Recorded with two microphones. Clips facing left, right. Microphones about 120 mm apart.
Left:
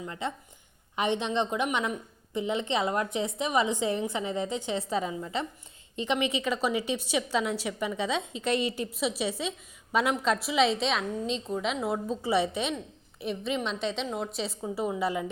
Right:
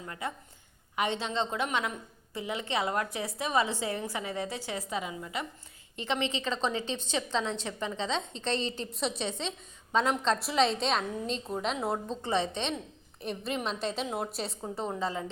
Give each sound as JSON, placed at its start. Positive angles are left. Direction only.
{"t": 0.0, "sound": "a woman's voice", "side_deg": 25}
{"t": 6.0, "sound": "a woman's voice", "side_deg": 15}